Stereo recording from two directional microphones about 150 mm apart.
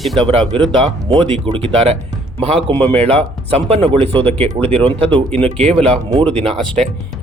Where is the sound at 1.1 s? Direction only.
35° right (ahead or behind).